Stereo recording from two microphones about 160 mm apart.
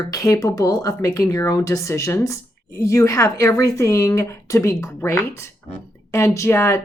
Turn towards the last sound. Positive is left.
turn(degrees=15)  # may be behind; listen again after turning